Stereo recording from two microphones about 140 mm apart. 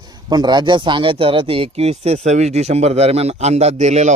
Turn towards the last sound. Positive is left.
turn(degrees=-55)  # may be behind; listen again after turning